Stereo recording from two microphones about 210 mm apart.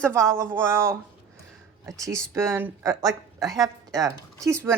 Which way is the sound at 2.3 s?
10° right (ahead or behind).